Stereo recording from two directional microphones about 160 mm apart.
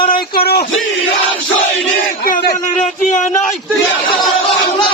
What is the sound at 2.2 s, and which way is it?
Speech, 60° left (ahead or behind).